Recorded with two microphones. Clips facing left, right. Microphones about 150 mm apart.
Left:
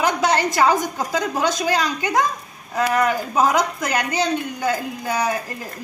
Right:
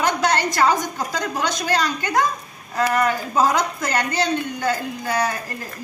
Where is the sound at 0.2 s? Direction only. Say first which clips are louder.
Left 1 dB; 5° left (ahead or behind).